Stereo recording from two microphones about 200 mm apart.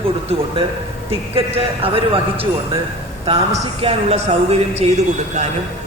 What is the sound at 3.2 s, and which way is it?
Speech, 30° right (ahead or behind).